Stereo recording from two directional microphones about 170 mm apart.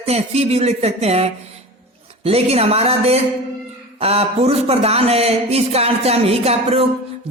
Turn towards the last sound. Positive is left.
turn(degrees=-35)  # may be behind; listen again after turning